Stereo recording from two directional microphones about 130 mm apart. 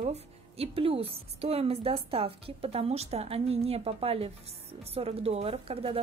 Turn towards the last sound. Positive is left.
turn(degrees=-45)  # may be behind; listen again after turning